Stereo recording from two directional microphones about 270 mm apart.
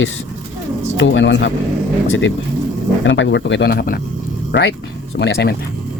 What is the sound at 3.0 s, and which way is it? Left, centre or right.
Speech, left.